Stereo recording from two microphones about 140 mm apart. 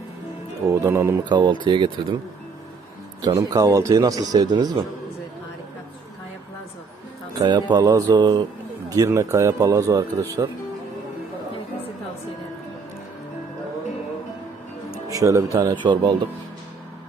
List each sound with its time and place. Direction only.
0.7 s speech: 15° right (ahead or behind)
1.3 s speech: 30° right (ahead or behind)
3.2 s speech: 25° right (ahead or behind)
7.3 s speech: 30° right (ahead or behind)
15.1 s speech: 20° right (ahead or behind)